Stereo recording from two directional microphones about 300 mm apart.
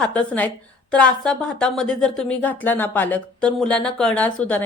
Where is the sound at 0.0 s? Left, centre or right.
Centre.